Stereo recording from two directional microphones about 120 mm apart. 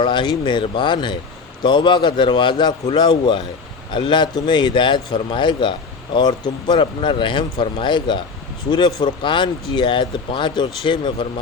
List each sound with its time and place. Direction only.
0.0 s speech: 40° left (ahead or behind)